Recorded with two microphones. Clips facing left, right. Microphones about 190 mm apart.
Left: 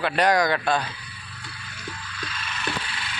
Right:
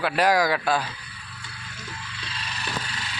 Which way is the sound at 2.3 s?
35° right (ahead or behind).